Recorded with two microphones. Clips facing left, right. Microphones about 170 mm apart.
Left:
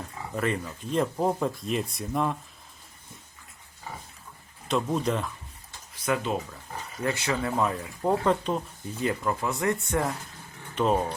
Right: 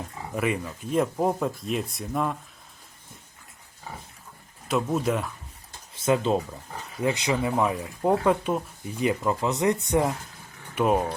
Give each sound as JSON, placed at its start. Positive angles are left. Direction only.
{"t": 0.3, "sound": "speech", "side_deg": -10}
{"t": 4.7, "sound": "speech", "side_deg": -5}
{"t": 5.9, "sound": "speech", "side_deg": -25}
{"t": 7.0, "sound": "speech", "side_deg": -15}